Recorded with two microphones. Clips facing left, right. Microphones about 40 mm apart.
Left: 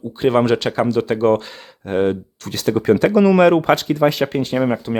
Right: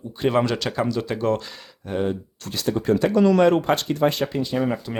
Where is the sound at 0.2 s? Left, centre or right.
Left.